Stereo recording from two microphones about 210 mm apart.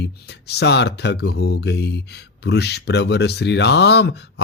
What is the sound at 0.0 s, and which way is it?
Speech, 50° left (ahead or behind).